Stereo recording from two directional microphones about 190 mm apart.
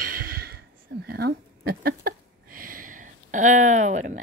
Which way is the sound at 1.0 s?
55° right (ahead or behind).